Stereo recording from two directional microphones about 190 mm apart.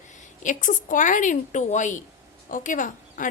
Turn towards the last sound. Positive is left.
turn(degrees=45)  # may be behind; listen again after turning